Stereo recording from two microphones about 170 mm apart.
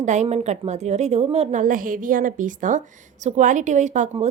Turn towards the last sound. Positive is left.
turn(degrees=-45)  # may be behind; listen again after turning